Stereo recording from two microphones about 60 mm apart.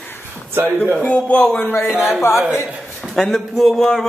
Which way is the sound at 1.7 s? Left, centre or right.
Left.